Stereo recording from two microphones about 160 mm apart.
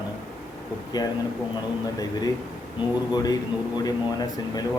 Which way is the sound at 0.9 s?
25° left (ahead or behind).